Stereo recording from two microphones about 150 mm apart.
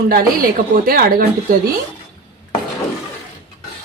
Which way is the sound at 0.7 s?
75° right (ahead or behind).